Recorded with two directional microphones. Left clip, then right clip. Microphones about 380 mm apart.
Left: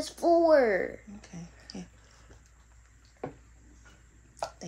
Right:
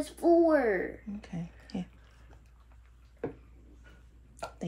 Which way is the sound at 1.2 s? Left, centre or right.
Centre.